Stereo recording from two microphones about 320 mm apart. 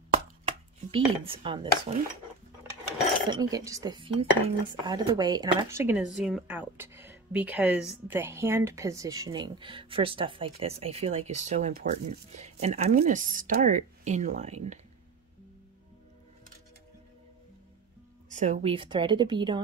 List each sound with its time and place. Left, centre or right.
0.1 s chopping: centre
3.3 s speech: centre
18.3 s speech: right